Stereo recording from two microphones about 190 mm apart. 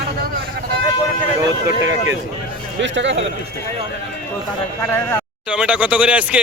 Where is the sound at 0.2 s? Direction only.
50° right (ahead or behind).